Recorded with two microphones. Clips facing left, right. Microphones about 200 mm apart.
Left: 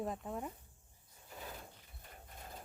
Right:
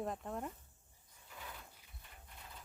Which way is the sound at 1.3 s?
35° left (ahead or behind).